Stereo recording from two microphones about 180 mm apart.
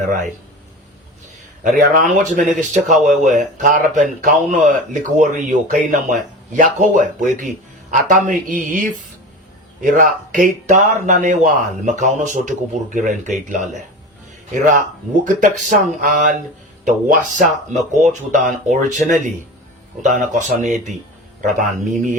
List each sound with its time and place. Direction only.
1.6 s speech: 45° right (ahead or behind)
15.2 s speech: 45° right (ahead or behind)